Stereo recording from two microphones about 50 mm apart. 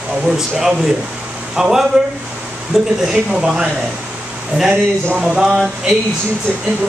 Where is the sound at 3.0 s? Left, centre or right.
Centre.